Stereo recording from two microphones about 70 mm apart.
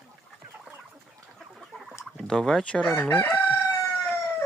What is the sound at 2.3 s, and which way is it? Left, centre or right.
Speech, centre.